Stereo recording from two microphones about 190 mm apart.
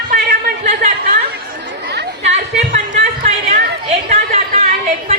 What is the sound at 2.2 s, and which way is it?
Chatter, 40° right (ahead or behind).